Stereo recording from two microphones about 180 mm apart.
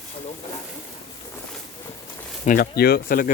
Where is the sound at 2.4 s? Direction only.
50° left (ahead or behind).